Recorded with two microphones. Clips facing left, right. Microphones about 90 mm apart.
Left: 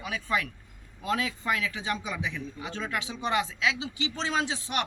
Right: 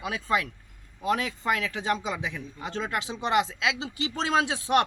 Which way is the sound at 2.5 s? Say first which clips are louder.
Right 6 dB; 35° right (ahead or behind).